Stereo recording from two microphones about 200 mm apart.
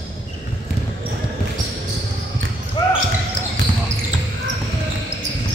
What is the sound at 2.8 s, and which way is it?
Basketball bounce, 20° left (ahead or behind).